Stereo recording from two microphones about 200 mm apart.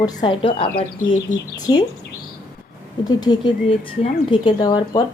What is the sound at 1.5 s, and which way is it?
Speech, 20° left (ahead or behind).